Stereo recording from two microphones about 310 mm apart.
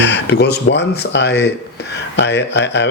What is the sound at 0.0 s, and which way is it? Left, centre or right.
Speech, left.